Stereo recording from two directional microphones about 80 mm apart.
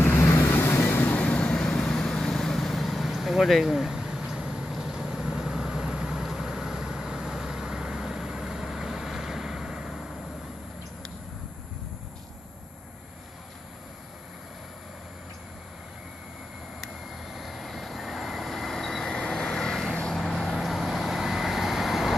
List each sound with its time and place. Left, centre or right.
0.0 s vehicle: left
0.8 s vehicle: left
1.2 s vehicle: centre
16.8 s vehicle: centre